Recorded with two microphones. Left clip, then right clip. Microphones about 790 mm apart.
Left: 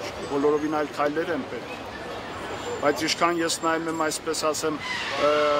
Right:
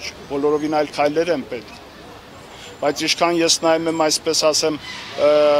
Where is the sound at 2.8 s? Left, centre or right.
Right.